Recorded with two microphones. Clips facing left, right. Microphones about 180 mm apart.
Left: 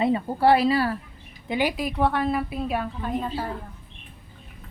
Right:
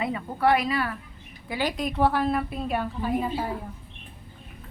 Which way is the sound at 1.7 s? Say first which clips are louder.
Even; 5° left (ahead or behind).